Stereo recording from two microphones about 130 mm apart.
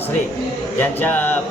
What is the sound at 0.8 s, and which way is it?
Speech, 15° left (ahead or behind).